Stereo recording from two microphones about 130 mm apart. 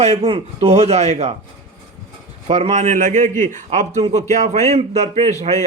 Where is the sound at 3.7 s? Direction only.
55° right (ahead or behind).